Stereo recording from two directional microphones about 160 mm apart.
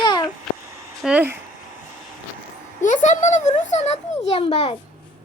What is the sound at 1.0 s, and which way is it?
Speech, 10° right (ahead or behind).